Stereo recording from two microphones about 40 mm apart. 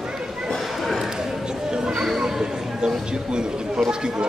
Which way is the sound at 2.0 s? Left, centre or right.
Centre.